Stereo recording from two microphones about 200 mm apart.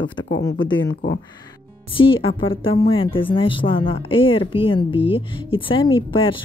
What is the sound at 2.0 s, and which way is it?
Speech, 25° left (ahead or behind).